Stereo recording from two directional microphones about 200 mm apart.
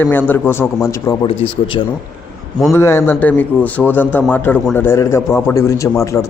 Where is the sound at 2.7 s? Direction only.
10° left (ahead or behind).